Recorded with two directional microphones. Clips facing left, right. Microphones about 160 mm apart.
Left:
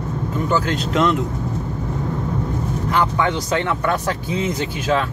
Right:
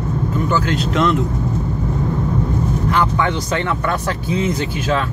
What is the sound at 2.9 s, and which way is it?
Speech, 15° left (ahead or behind).